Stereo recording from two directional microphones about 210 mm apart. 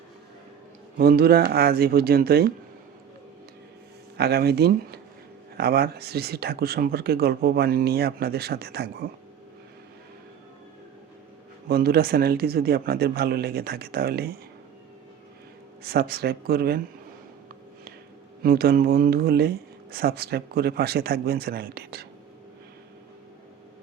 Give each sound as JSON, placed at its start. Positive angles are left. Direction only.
{"t": 0.9, "sound": "speech", "side_deg": -45}
{"t": 4.2, "sound": "speech", "side_deg": -50}
{"t": 11.7, "sound": "speech", "side_deg": -50}
{"t": 15.8, "sound": "speech", "side_deg": -45}
{"t": 18.4, "sound": "speech", "side_deg": -45}